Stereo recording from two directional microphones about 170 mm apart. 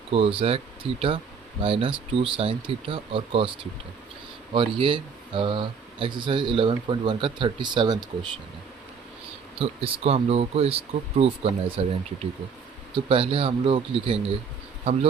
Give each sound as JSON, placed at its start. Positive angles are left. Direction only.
{"t": 0.1, "sound": "speech", "side_deg": -35}
{"t": 4.5, "sound": "speech", "side_deg": -30}
{"t": 9.6, "sound": "speech", "side_deg": -35}